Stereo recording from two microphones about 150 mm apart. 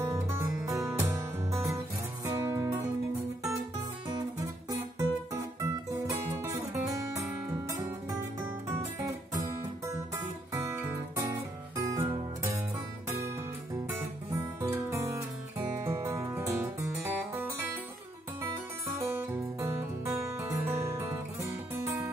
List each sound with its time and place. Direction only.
0.0 s music: 15° right (ahead or behind)
4.6 s music: 20° right (ahead or behind)
9.4 s music: 20° right (ahead or behind)
14.6 s music: 15° right (ahead or behind)
18.9 s music: 15° right (ahead or behind)